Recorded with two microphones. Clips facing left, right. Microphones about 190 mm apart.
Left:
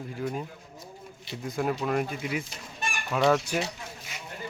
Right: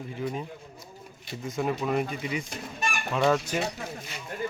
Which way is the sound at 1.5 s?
Centre (ahead or behind).